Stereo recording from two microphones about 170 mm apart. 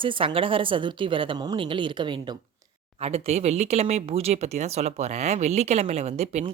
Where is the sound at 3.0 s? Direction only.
35° right (ahead or behind).